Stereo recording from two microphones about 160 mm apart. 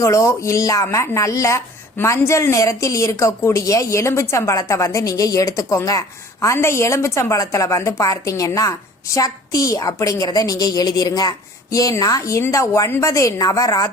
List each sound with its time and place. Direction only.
0.0 s speech: 20° left (ahead or behind)